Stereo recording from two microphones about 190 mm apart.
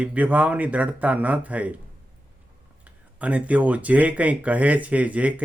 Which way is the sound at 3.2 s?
5° right (ahead or behind).